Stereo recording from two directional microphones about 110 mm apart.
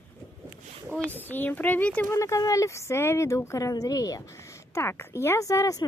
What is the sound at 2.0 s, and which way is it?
Speech, 30° left (ahead or behind).